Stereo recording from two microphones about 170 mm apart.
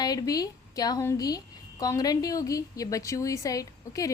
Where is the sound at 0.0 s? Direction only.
20° left (ahead or behind).